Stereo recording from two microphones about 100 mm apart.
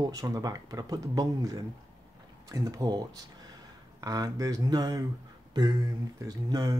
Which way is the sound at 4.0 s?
40° right (ahead or behind).